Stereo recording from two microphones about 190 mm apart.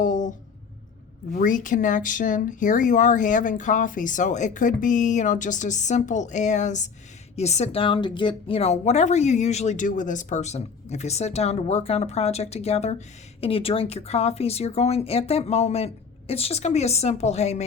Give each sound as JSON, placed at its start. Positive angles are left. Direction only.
{"t": 0.0, "sound": "speech", "side_deg": 40}